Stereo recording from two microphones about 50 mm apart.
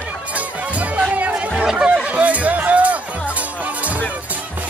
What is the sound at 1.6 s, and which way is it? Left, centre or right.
Chatter, centre.